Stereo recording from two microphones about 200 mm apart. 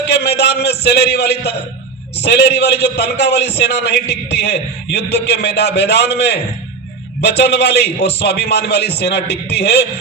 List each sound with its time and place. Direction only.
0.1 s a man's voice: 55° left (ahead or behind)